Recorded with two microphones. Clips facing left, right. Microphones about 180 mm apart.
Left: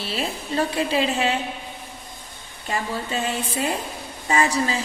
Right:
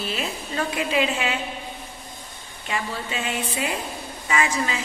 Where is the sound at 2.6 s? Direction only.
40° left (ahead or behind).